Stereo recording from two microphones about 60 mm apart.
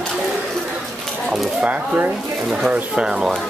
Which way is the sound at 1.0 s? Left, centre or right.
Centre.